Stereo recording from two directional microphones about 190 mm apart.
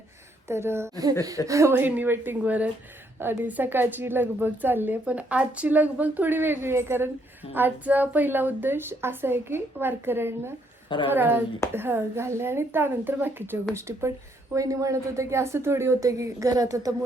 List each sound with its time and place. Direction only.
0.4 s a woman's voice: 15° right (ahead or behind)